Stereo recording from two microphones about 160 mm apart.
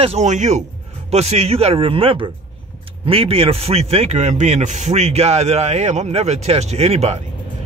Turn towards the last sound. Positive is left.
turn(degrees=-40)  # may be behind; listen again after turning